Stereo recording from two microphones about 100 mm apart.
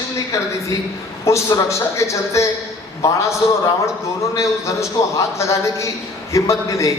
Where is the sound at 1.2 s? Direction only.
30° left (ahead or behind).